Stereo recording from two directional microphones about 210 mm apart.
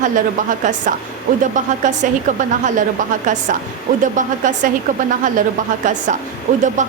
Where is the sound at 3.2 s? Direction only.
35° right (ahead or behind).